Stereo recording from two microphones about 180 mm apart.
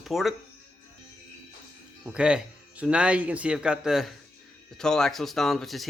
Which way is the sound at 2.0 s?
5° right (ahead or behind).